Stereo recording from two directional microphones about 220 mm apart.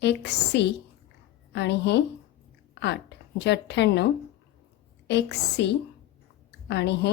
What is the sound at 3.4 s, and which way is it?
A woman's voice, 50° left (ahead or behind).